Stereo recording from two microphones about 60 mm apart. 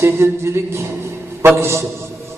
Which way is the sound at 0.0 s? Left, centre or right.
Right.